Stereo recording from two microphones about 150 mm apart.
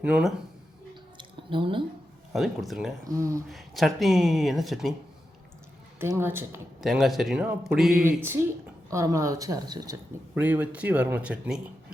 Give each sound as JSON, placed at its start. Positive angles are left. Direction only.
{"t": 0.0, "sound": "speech", "side_deg": -5}
{"t": 1.2, "sound": "squish", "side_deg": -35}
{"t": 2.3, "sound": "speech", "side_deg": 0}
{"t": 3.1, "sound": "speech", "side_deg": -20}
{"t": 3.5, "sound": "speech", "side_deg": 0}
{"t": 6.0, "sound": "speech", "side_deg": -15}
{"t": 6.8, "sound": "speech", "side_deg": 0}
{"t": 8.0, "sound": "speech", "side_deg": -15}
{"t": 10.4, "sound": "speech", "side_deg": -10}